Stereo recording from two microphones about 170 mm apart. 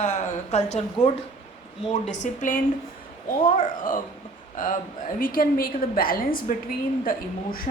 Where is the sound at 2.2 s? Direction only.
50° left (ahead or behind).